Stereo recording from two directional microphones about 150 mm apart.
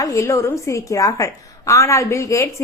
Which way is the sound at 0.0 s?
20° left (ahead or behind).